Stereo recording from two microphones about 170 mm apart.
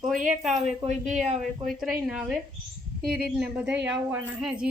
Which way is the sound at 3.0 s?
65° right (ahead or behind).